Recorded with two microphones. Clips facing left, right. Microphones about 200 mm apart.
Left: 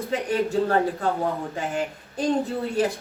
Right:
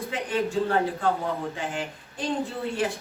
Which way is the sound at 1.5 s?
40° left (ahead or behind).